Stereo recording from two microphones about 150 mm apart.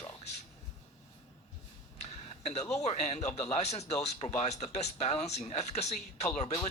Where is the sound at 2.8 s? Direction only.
45° left (ahead or behind).